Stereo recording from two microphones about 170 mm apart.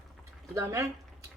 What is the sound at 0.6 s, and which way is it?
Speech, 15° right (ahead or behind).